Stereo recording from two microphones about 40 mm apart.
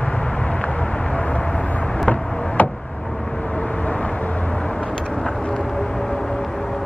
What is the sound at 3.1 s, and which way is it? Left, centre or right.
Vehicle, centre.